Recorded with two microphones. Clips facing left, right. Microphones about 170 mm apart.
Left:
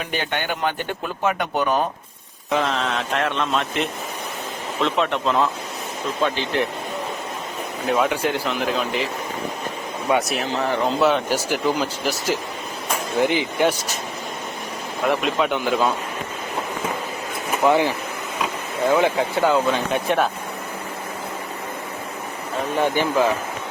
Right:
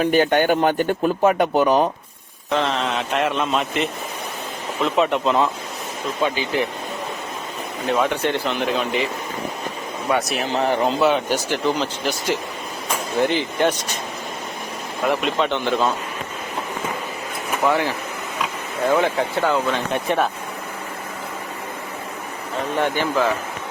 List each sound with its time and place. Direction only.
0.0 s speech: 45° right (ahead or behind)
2.5 s speech: centre (ahead or behind)
7.9 s speech: centre (ahead or behind)
10.1 s speech: 10° left (ahead or behind)
11.0 s speech: centre (ahead or behind)
15.0 s speech: centre (ahead or behind)
17.6 s speech: 15° left (ahead or behind)
18.9 s speech: 5° left (ahead or behind)
22.8 s speech: 15° left (ahead or behind)